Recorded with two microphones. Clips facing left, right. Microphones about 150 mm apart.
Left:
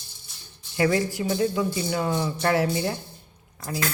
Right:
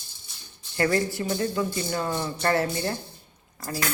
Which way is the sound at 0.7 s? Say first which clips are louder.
Left 1 dB; 5° left (ahead or behind).